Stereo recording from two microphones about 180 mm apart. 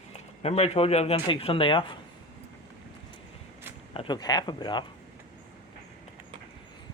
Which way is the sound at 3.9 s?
25° left (ahead or behind).